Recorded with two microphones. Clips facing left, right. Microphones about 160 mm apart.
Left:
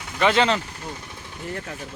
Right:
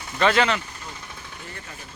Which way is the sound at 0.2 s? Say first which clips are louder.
Left 1 dB; 20° left (ahead or behind).